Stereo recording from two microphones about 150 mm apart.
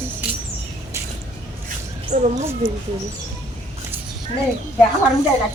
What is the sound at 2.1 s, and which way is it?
Mouse, 50° right (ahead or behind).